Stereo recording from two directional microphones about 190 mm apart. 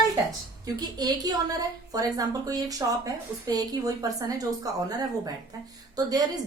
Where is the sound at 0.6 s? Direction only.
20° right (ahead or behind).